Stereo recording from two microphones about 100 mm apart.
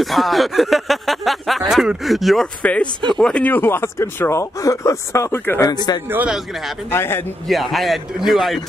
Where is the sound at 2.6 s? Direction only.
15° left (ahead or behind).